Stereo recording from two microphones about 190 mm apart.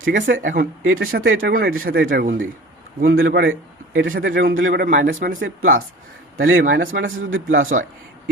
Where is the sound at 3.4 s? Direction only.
90° right.